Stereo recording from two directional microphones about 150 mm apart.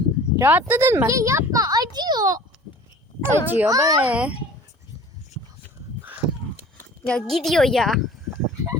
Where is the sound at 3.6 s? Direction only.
20° right (ahead or behind).